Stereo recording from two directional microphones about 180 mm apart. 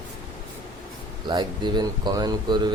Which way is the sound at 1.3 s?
25° right (ahead or behind).